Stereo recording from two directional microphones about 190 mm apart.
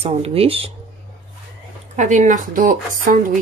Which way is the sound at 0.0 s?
30° right (ahead or behind).